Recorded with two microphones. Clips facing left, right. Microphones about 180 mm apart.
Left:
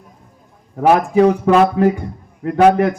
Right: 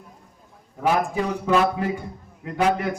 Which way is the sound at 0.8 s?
65° left (ahead or behind).